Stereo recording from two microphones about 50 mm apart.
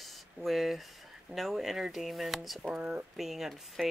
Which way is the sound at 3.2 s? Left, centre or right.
Centre.